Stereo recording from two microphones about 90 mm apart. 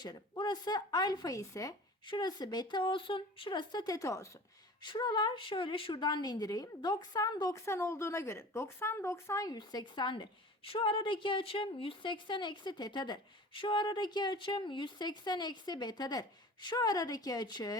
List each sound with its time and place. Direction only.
0.0 s a woman's voice: 55° left (ahead or behind); by 1.7 s 40° left (ahead or behind)
2.0 s a woman's voice: 55° left (ahead or behind); by 4.3 s 35° left (ahead or behind)
4.8 s a woman's voice: 55° left (ahead or behind)
7.5 s a woman's voice: 30° left (ahead or behind)
9.6 s a woman's voice: 55° left (ahead or behind)
10.7 s a woman's voice: 70° left (ahead or behind); by 17.7 s 50° left (ahead or behind)